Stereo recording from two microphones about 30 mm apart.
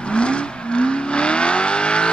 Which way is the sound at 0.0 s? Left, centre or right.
Left.